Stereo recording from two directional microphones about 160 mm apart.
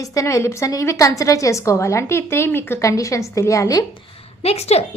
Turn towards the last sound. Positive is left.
turn(degrees=40)  # may be behind; listen again after turning